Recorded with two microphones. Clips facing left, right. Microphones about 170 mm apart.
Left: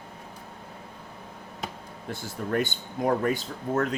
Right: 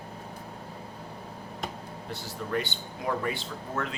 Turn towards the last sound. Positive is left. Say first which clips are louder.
# left 6 dB
turn(degrees=45)  # may be behind; listen again after turning